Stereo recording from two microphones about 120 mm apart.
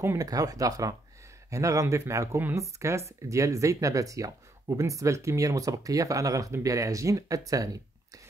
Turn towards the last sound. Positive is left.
turn(degrees=-30)  # may be behind; listen again after turning